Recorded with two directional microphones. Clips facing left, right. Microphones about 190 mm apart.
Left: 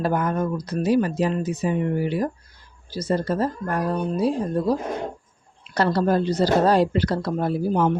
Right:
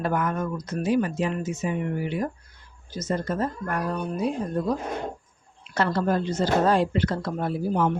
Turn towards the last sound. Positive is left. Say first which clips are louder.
# left 3 dB
turn(degrees=35)  # may be behind; listen again after turning